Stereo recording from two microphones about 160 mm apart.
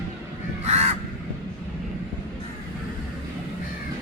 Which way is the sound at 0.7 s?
45° right (ahead or behind).